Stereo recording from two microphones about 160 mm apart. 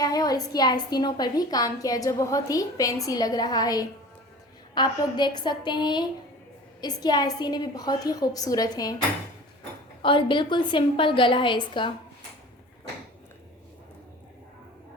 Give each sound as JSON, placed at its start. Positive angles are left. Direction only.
{"t": 0.0, "sound": "a woman's voice", "side_deg": 25}
{"t": 10.0, "sound": "a woman's voice", "side_deg": 30}